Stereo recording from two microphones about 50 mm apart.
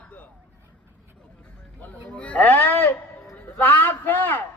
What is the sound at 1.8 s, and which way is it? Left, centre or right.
A man's voice, left.